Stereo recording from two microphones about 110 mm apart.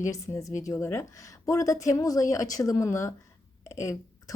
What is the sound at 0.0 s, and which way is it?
A woman's voice, 25° left (ahead or behind).